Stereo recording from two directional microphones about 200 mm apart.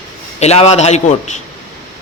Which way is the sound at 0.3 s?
30° left (ahead or behind).